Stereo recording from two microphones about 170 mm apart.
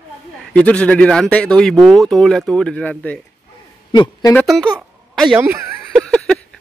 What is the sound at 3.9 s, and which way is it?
Speech, 25° left (ahead or behind).